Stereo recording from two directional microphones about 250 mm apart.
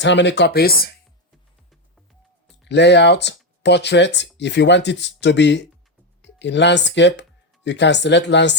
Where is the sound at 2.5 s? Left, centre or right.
Left.